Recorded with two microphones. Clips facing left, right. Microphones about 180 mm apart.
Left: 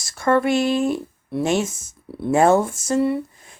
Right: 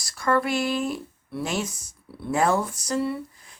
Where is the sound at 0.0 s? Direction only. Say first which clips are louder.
Left 5 dB; 25° left (ahead or behind).